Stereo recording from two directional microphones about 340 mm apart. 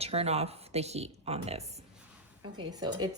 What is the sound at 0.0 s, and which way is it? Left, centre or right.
Speech, centre.